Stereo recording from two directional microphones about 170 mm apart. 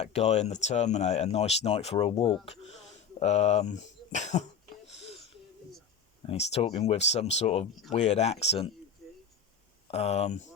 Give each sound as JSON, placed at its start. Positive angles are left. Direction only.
{"t": 0.0, "sound": "speech", "side_deg": 40}
{"t": 4.9, "sound": "wheeze", "side_deg": 35}
{"t": 6.2, "sound": "speech", "side_deg": 35}
{"t": 9.9, "sound": "speech", "side_deg": 40}